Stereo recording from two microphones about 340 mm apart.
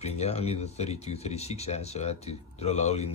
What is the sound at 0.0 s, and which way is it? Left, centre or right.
Speech, centre.